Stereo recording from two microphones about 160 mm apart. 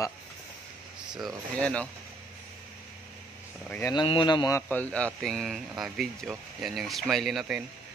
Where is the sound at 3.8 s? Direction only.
30° left (ahead or behind).